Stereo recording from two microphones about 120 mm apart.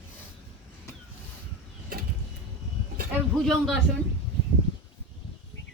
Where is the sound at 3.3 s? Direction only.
5° left (ahead or behind).